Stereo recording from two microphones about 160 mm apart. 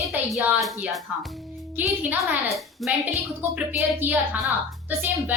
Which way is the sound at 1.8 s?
10° right (ahead or behind).